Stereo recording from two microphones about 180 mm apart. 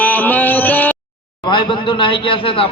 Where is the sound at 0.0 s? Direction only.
10° left (ahead or behind).